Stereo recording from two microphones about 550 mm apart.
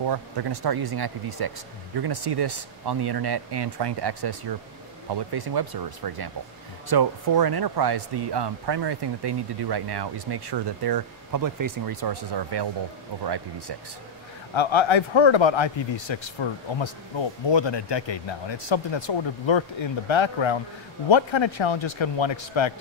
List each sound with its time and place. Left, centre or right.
0.0 s speech: right
14.5 s speech: left